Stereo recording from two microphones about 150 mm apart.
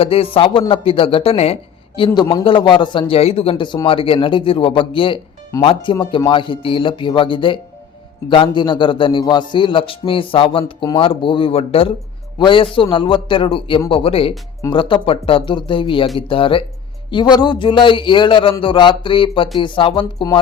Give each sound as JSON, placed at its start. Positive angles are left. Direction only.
{"t": 0.0, "sound": "a man's voice", "side_deg": 40}
{"t": 2.0, "sound": "a man's voice", "side_deg": 30}